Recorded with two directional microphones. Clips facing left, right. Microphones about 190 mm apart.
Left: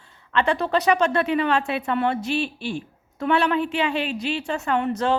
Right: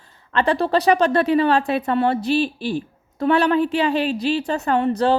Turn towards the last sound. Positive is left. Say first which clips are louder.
# right 4 dB
turn(degrees=-35)  # may be behind; listen again after turning